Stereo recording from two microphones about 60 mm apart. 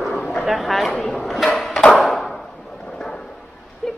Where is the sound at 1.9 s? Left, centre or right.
Centre.